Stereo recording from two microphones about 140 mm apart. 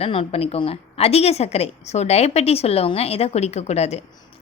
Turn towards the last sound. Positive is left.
turn(degrees=50)  # may be behind; listen again after turning